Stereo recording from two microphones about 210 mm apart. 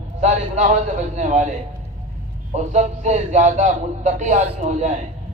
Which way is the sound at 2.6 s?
35° right (ahead or behind).